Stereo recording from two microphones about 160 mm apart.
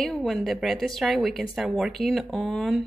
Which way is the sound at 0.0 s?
Centre (ahead or behind).